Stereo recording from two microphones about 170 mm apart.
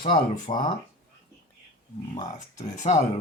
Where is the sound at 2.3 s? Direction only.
45° left (ahead or behind).